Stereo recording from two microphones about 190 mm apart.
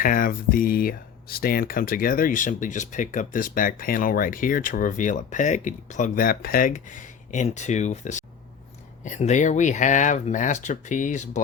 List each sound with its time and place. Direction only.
0.0 s speech: 50° left (ahead or behind)